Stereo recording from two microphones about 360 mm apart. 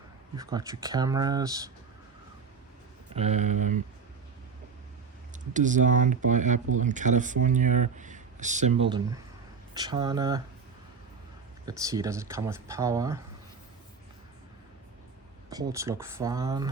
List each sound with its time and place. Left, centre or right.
0.3 s speech: centre
3.2 s speech: centre
5.3 s speech: right
11.6 s speech: centre
15.7 s speech: centre